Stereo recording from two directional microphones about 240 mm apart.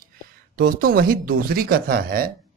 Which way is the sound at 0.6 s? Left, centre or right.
Right.